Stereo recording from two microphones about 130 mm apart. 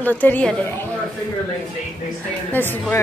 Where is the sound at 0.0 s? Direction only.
15° left (ahead or behind).